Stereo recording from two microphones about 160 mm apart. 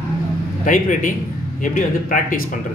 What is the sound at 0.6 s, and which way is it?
A man's voice, 55° left (ahead or behind).